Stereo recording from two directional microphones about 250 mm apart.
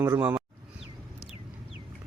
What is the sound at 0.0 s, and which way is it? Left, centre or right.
Speech, centre.